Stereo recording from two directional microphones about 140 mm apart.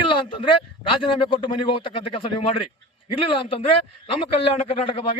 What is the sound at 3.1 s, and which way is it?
Speech, 40° left (ahead or behind).